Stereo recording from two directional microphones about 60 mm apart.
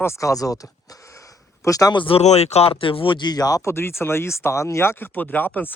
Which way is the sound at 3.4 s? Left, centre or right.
Left.